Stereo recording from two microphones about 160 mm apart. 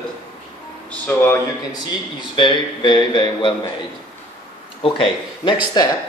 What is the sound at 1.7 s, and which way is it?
Speech, 30° left (ahead or behind).